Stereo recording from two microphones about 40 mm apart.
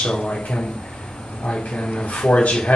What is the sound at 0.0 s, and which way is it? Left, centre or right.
Speech, left.